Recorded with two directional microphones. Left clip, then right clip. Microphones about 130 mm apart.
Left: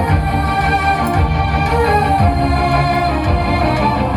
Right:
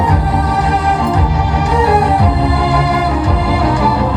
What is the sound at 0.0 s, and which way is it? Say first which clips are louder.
Music: right 3 dB; 10° left (ahead or behind).